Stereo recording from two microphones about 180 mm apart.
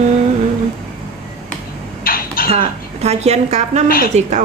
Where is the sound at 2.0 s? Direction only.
55° left (ahead or behind).